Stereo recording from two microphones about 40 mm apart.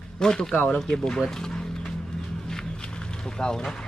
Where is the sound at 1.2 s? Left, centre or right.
Centre.